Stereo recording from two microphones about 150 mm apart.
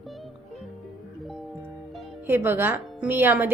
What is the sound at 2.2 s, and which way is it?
Speech, 15° right (ahead or behind).